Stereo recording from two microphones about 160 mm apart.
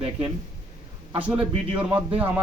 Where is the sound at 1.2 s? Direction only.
10° right (ahead or behind).